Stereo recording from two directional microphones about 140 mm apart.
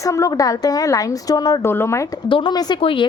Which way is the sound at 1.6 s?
15° left (ahead or behind).